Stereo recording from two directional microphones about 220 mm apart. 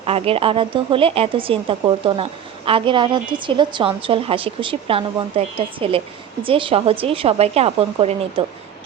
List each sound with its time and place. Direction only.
0.0 s a woman's voice: 25° right (ahead or behind)